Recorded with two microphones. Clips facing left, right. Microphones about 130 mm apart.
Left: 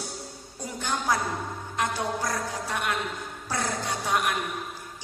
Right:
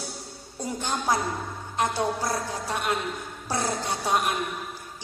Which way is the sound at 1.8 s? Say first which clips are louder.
Right 3 dB; 35° right (ahead or behind).